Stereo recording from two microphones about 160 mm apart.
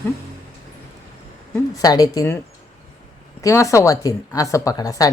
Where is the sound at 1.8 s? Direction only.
25° left (ahead or behind).